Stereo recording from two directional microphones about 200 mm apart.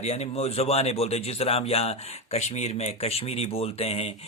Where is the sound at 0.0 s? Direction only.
30° left (ahead or behind).